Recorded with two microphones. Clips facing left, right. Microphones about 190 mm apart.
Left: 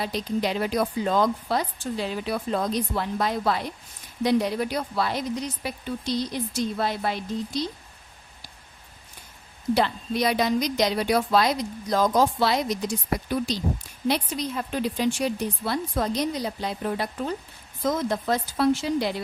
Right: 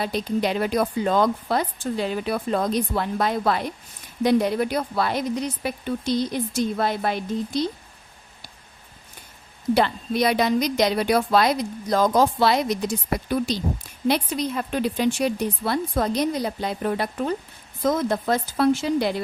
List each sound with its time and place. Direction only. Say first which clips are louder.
0.0 s speech: right 3 dB; 55° right (ahead or behind)
9.7 s speech: right 3 dB; 60° right (ahead or behind)
14.1 s speech: right 3 dB; 60° right (ahead or behind)